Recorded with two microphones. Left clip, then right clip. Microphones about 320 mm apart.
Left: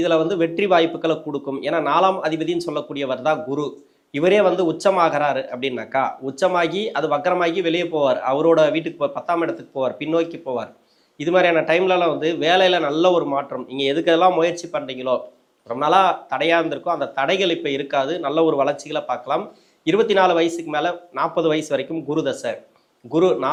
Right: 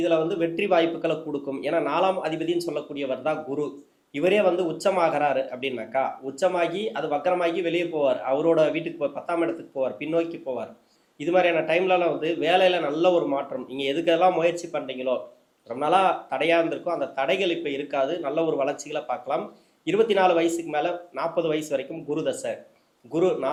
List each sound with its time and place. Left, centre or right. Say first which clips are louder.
0.0 s speech: left 5 dB; left
15.7 s speech: left 5 dB; left